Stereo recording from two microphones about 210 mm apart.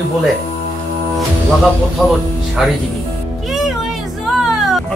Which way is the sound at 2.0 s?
Centre (ahead or behind).